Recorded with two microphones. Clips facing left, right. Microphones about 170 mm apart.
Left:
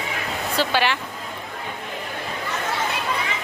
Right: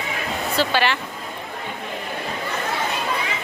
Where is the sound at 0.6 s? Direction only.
10° left (ahead or behind).